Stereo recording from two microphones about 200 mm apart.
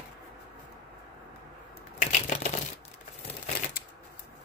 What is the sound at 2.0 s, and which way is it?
Crushing, 35° left (ahead or behind).